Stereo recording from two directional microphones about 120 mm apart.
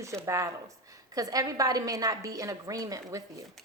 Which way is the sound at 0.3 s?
25° right (ahead or behind).